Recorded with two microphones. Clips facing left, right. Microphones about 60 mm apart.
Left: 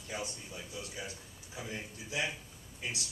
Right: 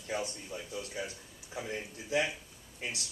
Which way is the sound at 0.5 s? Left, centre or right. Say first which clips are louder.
Right 4 dB; right.